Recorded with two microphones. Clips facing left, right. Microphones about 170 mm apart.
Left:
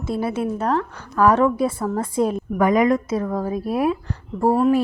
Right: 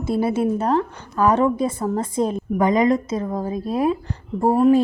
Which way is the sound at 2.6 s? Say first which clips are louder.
Even; 20° right (ahead or behind).